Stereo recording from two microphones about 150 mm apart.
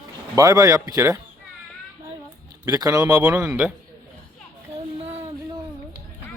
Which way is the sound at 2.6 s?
20° right (ahead or behind).